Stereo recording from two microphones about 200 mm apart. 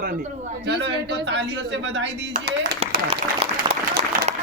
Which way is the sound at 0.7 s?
60° right (ahead or behind).